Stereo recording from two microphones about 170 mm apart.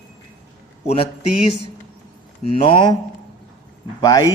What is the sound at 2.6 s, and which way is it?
Speech, 30° left (ahead or behind).